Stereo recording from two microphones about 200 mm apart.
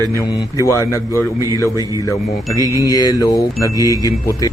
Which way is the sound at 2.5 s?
15° right (ahead or behind).